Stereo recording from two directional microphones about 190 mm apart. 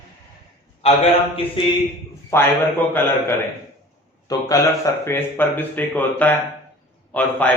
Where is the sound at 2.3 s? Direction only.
10° left (ahead or behind).